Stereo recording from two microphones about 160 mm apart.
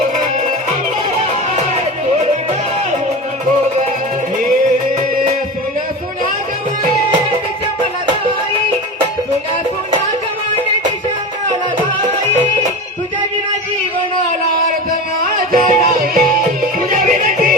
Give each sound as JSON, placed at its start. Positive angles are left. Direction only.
{"t": 15.5, "sound": "music", "side_deg": -60}